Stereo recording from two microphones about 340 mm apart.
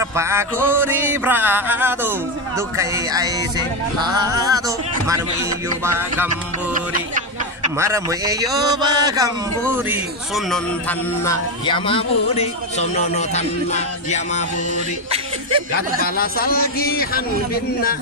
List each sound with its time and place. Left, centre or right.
0.0 s mantra: centre
6.7 s speech: right
7.7 s mantra: centre
9.6 s a man's voice: centre
16.0 s a man's voice: left